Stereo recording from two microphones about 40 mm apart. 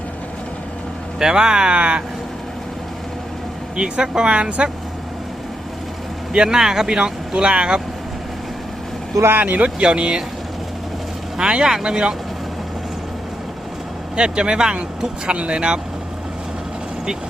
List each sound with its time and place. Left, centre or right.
1.2 s speech: centre
3.8 s speech: centre
4.3 s speech: right
6.3 s speech: centre
9.6 s speech: right
11.3 s speech: right
14.2 s speech: right